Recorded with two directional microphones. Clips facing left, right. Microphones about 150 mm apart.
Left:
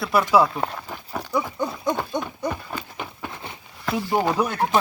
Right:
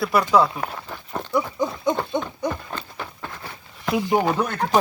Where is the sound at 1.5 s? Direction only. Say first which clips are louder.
Right 2 dB; centre (ahead or behind).